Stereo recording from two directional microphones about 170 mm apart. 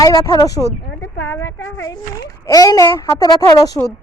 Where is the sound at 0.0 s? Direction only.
20° left (ahead or behind).